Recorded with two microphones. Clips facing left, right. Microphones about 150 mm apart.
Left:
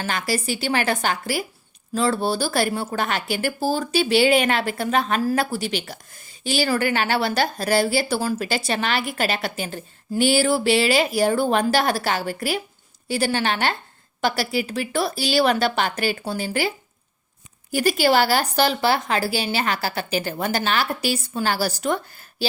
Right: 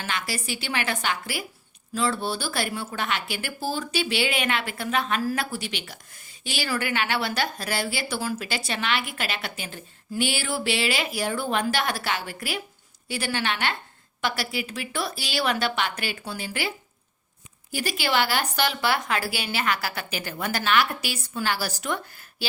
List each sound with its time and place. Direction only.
0.0 s a woman's voice: 40° left (ahead or behind)